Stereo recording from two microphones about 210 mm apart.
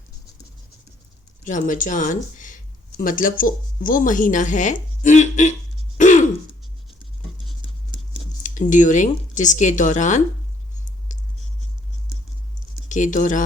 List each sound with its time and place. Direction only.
1.5 s speech: 35° left (ahead or behind)
6.0 s throat clearing: 35° left (ahead or behind)
8.4 s speech: 35° left (ahead or behind)
12.9 s speech: 35° left (ahead or behind)